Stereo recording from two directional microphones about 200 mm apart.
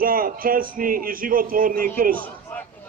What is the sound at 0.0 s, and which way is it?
A man's voice, 45° right (ahead or behind).